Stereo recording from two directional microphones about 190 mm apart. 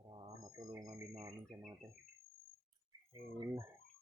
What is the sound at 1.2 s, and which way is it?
Speech, 10° right (ahead or behind).